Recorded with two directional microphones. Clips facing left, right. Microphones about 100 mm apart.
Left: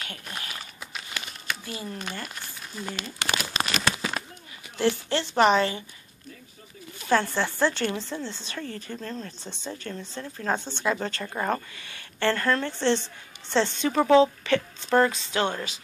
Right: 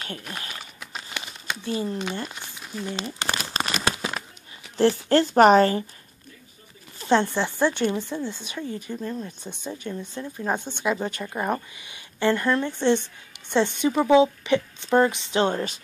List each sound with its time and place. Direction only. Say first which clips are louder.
1.1 s speech: right 1 dB; 25° right (ahead or behind)
3.2 s crumpling: left 2 dB; 35° right (ahead or behind)
4.7 s speech: right 6 dB; 40° right (ahead or behind)
7.0 s speech: right 3 dB; 25° right (ahead or behind)